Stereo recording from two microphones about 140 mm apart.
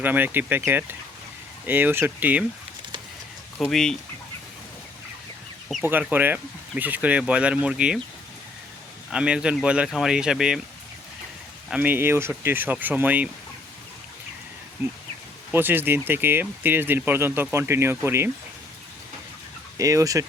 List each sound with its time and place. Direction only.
0.0 s speech: 15° right (ahead or behind)
3.7 s speech: centre (ahead or behind)
5.8 s speech: 10° right (ahead or behind)
9.1 s speech: 5° right (ahead or behind)
11.7 s speech: 10° right (ahead or behind)
15.5 s speech: 15° right (ahead or behind)
19.7 s speech: 25° right (ahead or behind)